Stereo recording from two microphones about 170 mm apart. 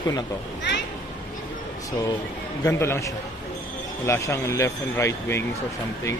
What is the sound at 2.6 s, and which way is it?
Speech, 15° left (ahead or behind).